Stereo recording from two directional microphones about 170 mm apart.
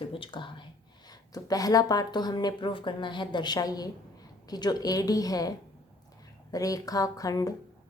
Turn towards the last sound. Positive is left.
turn(degrees=20)  # may be behind; listen again after turning